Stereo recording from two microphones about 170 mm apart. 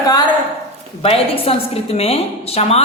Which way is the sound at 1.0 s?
35° left (ahead or behind).